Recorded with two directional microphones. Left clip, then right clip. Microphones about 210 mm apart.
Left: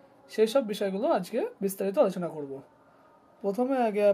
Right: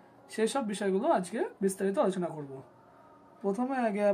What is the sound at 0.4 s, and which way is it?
Speech, 40° left (ahead or behind).